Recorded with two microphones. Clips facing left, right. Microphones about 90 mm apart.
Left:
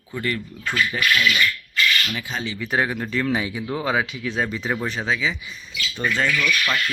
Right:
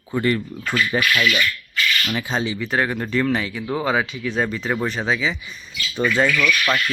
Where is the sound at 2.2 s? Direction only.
35° right (ahead or behind).